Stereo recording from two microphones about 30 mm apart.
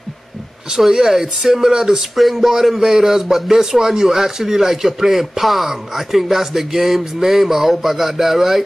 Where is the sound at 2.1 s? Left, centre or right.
Centre.